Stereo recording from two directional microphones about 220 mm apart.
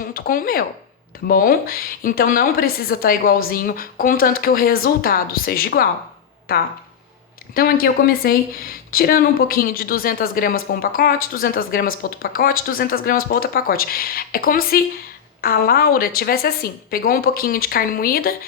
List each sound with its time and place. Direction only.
0.0 s speech: 40° left (ahead or behind)
7.5 s a woman's voice: 40° left (ahead or behind)